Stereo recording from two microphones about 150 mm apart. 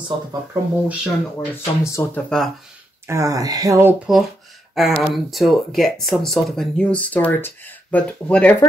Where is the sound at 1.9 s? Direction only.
20° left (ahead or behind).